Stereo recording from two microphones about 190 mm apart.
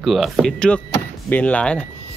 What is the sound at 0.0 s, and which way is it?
Speech, centre (ahead or behind).